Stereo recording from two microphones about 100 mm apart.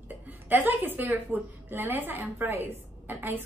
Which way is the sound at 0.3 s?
20° right (ahead or behind).